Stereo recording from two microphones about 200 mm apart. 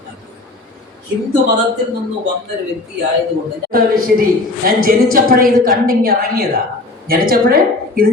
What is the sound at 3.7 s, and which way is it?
A woman's voice, 45° right (ahead or behind).